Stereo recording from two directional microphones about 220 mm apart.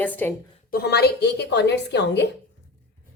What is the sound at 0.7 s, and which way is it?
A woman's voice, 45° left (ahead or behind).